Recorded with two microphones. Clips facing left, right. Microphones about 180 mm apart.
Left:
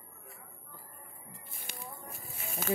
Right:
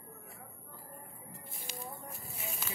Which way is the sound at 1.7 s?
60° left (ahead or behind).